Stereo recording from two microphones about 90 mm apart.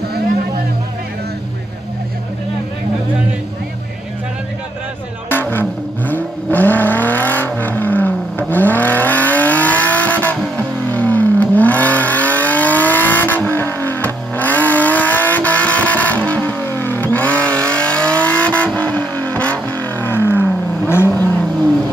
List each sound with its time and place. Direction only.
5.3 s vehicle: 25° left (ahead or behind)